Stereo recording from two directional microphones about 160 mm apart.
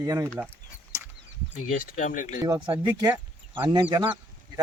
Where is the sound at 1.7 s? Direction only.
55° left (ahead or behind).